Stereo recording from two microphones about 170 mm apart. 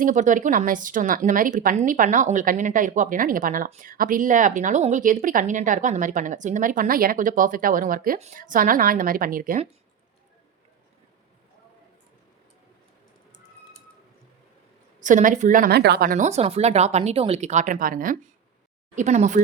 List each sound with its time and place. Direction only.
0.0 s a woman's voice: 50° right (ahead or behind)
15.0 s a woman's voice: 50° right (ahead or behind)
18.9 s a woman's voice: 45° right (ahead or behind)